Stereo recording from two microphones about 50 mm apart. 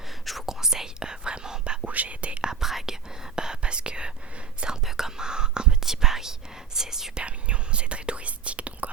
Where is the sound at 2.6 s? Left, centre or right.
Centre.